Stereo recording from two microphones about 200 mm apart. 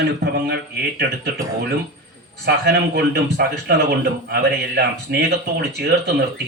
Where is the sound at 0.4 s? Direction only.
55° right (ahead or behind).